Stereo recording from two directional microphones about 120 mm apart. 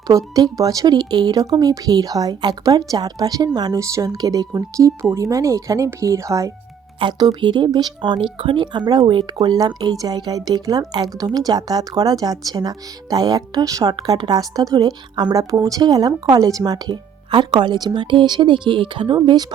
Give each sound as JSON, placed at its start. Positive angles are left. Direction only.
{"t": 0.3, "sound": "speech", "side_deg": -30}